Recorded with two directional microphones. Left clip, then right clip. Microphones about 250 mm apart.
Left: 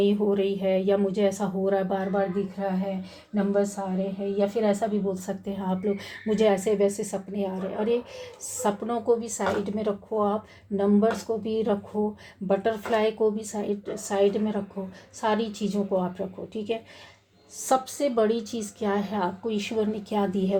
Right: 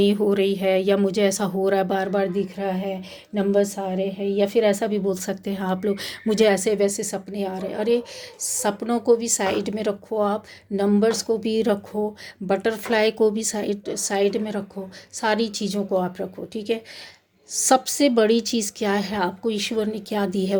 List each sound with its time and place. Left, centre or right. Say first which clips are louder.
0.0 s a woman's voice: right 4 dB; right